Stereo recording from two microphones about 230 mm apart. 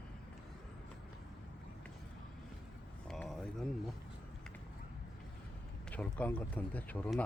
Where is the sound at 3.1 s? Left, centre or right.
Centre.